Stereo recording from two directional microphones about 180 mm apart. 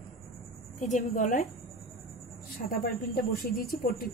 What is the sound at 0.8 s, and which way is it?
Speech, 45° left (ahead or behind).